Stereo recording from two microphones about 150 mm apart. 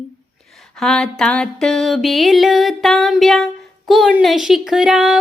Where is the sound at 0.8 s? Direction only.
5° left (ahead or behind).